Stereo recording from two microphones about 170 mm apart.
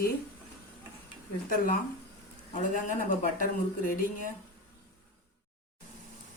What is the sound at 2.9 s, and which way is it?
Speech, 50° left (ahead or behind).